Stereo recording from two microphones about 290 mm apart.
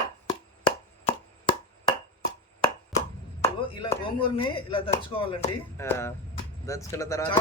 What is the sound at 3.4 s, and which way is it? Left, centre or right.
A man's voice, centre.